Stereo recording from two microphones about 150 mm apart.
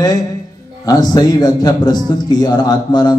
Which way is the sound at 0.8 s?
25° left (ahead or behind).